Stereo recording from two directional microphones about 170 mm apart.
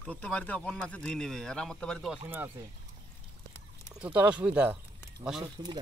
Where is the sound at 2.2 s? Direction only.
10° right (ahead or behind).